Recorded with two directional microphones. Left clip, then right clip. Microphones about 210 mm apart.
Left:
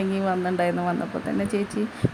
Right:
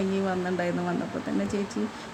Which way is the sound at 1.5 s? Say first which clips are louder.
Left 4 dB; 15° left (ahead or behind).